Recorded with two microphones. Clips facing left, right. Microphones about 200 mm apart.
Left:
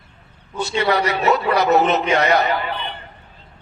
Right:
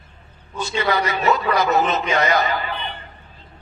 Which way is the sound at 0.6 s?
65° left (ahead or behind).